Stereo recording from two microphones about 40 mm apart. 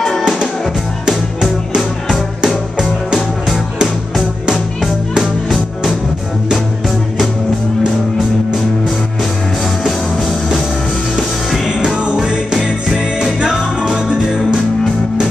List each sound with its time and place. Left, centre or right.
2.4 s music: centre
9.8 s music: centre
11.8 s music: right